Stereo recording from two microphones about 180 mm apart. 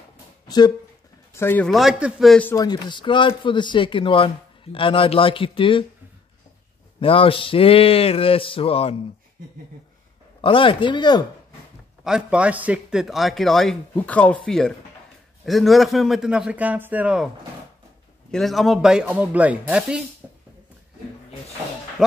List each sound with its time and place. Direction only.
0.5 s speech: 25° left (ahead or behind)
1.3 s speech: 10° left (ahead or behind)
1.7 s a man's voice: centre (ahead or behind)
2.5 s speech: 20° left (ahead or behind)
7.0 s a sound: 30° left (ahead or behind)
10.4 s speech: 30° left (ahead or behind)
12.0 s a man's voice: 5° right (ahead or behind)
18.3 s a man's voice: centre (ahead or behind)